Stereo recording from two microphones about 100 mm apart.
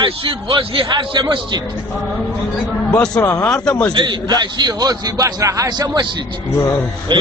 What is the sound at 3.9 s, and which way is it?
A man's voice, 50° right (ahead or behind).